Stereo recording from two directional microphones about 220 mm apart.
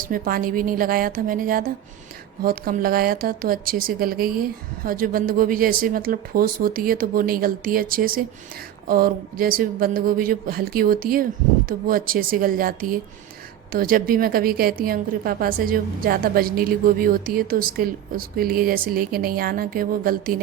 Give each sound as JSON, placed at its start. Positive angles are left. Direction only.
{"t": 0.0, "sound": "a woman's voice", "side_deg": -40}